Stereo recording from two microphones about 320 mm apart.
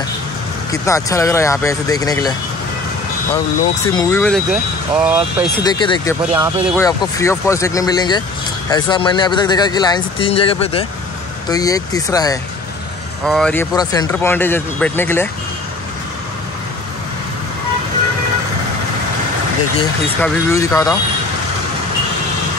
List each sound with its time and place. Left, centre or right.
0.7 s speech: centre
3.8 s speech: centre
5.6 s speech: centre
6.3 s speech: centre
6.8 s speech: centre
20.2 s speech: centre